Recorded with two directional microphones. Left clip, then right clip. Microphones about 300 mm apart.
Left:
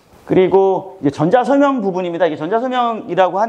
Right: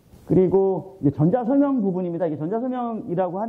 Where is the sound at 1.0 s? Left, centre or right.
Centre.